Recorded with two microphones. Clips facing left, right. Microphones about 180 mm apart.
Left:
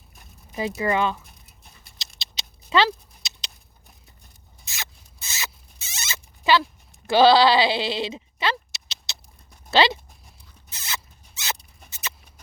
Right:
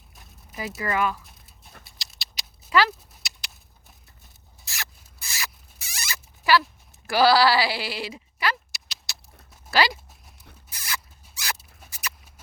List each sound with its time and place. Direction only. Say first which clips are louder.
0.8 s speech: left 2 dB; 25° left (ahead or behind)
1.2 s dog: even; centre (ahead or behind)
2.1 s a sound: left 4 dB; 20° left (ahead or behind)
3.2 s patter: even; 20° left (ahead or behind)
4.6 s rodents: even; 20° left (ahead or behind)
7.1 s bleat: left 3 dB; 20° left (ahead or behind)
9.6 s speech: left 4 dB; 25° left (ahead or behind)
10.7 s rodents: even; 25° left (ahead or behind)
11.9 s a sound: even; 25° left (ahead or behind)